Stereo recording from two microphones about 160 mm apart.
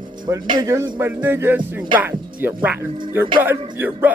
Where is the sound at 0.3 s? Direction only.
20° right (ahead or behind).